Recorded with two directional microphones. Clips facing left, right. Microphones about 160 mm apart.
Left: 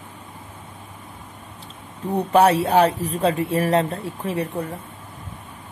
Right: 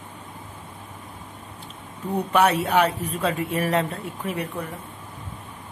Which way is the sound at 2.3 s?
35° left (ahead or behind).